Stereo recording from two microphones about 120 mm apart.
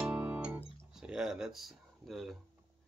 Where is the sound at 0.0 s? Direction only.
10° right (ahead or behind).